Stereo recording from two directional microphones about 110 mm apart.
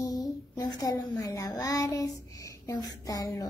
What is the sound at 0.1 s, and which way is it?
A woman's voice, 35° left (ahead or behind).